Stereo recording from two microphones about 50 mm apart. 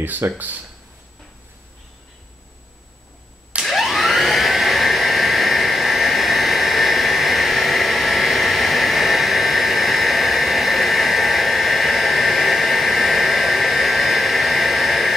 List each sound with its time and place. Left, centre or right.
0.2 s speech: right
3.6 s vacuum cleaner: centre